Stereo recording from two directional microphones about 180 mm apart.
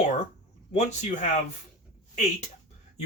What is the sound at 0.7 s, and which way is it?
Speech, 40° left (ahead or behind).